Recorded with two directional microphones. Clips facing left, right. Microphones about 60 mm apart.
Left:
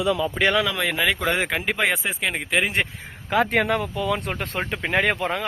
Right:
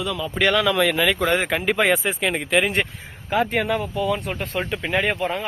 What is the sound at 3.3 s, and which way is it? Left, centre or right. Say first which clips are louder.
Speech: left 1 dB; left.